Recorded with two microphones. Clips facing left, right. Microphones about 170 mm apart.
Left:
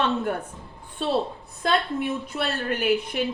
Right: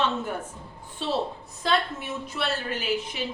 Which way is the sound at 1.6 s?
55° left (ahead or behind).